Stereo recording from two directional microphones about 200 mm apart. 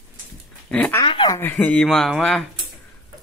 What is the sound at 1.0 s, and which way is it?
Speech, 25° left (ahead or behind).